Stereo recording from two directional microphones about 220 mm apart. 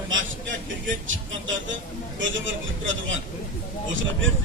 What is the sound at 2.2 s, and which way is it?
A man's voice, 60° right (ahead or behind).